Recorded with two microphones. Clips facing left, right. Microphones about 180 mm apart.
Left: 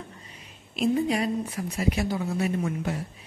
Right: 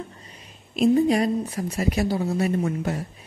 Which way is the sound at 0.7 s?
40° right (ahead or behind).